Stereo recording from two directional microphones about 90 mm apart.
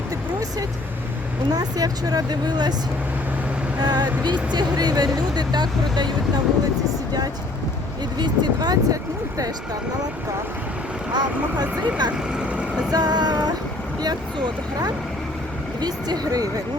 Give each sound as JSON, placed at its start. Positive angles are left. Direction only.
{"t": 1.5, "sound": "speech", "side_deg": -45}
{"t": 3.8, "sound": "speech", "side_deg": -50}
{"t": 8.2, "sound": "speech", "side_deg": -50}
{"t": 11.1, "sound": "speech", "side_deg": -55}
{"t": 12.4, "sound": "vehicle", "side_deg": -10}
{"t": 12.9, "sound": "vehicle", "side_deg": -50}
{"t": 15.8, "sound": "speech", "side_deg": -50}